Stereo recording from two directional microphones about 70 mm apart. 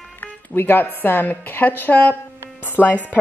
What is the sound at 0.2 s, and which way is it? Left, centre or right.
A woman's voice, left.